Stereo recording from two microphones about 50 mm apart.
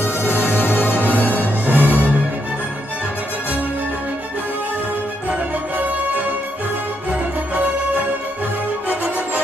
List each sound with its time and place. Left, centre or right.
0.0 s music: left
1.7 s music: right
7.5 s music: right